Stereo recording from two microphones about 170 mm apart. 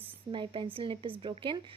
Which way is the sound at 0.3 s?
30° right (ahead or behind).